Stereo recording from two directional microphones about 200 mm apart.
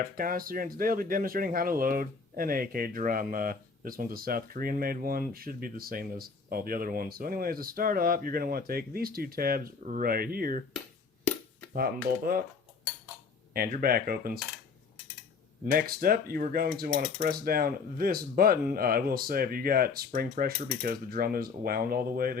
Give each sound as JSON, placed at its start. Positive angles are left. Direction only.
{"t": 0.0, "sound": "speech", "side_deg": -45}
{"t": 11.7, "sound": "speech", "side_deg": -45}
{"t": 13.5, "sound": "speech", "side_deg": -45}
{"t": 15.6, "sound": "speech", "side_deg": -45}